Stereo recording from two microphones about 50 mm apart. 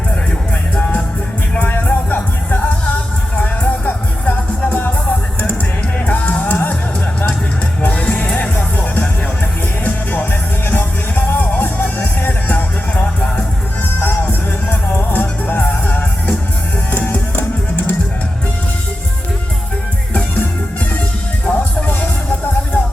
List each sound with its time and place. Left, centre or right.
0.8 s music: left
6.1 s music: left
7.8 s music: left
14.3 s music: left
21.4 s music: left